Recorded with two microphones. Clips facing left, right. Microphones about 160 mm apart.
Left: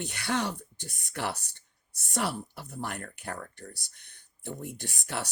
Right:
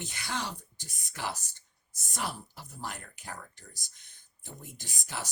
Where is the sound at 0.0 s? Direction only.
65° left (ahead or behind).